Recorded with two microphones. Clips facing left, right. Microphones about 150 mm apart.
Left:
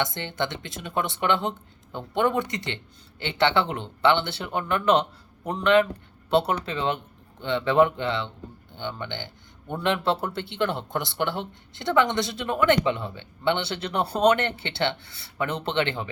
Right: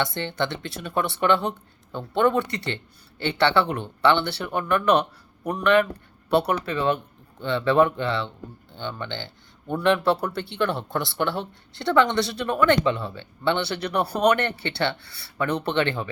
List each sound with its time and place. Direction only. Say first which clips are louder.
0.0 s speech: right 2 dB; 15° left (ahead or behind)